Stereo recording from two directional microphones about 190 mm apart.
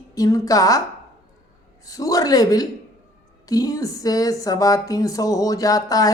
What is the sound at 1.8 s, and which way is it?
A woman's voice, 20° left (ahead or behind).